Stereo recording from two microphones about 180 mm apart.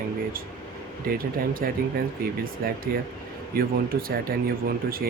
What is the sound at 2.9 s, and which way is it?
Speech, 55° right (ahead or behind).